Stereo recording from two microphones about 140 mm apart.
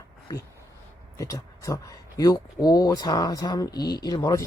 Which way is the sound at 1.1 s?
25° left (ahead or behind).